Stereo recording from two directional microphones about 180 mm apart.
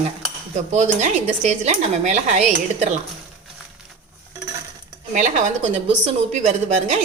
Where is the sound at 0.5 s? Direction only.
40° right (ahead or behind).